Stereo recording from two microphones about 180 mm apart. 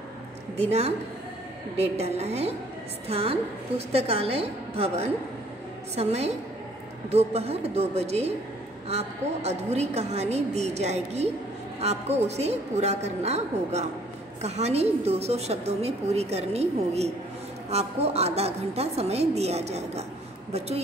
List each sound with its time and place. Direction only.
0.6 s a woman's voice: 35° right (ahead or behind)